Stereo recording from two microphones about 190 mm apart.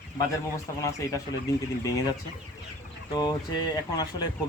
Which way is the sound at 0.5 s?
15° left (ahead or behind).